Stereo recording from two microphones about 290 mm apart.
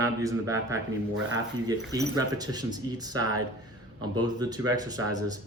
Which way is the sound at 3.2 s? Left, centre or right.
Right.